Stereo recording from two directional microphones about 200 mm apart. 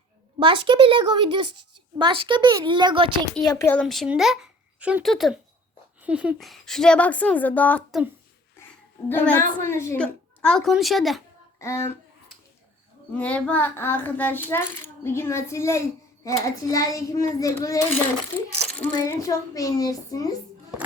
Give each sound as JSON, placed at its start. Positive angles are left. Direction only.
{"t": 0.3, "sound": "a child's voice", "side_deg": -25}
{"t": 3.4, "sound": "a woman's voice", "side_deg": 15}
{"t": 9.0, "sound": "a woman's voice", "side_deg": 10}
{"t": 11.6, "sound": "speech", "side_deg": 15}
{"t": 13.1, "sound": "speech", "side_deg": 5}